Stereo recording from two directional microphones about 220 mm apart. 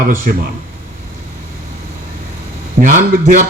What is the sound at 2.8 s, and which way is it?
Speech, 35° right (ahead or behind).